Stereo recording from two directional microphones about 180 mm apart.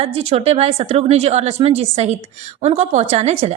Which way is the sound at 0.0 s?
35° right (ahead or behind).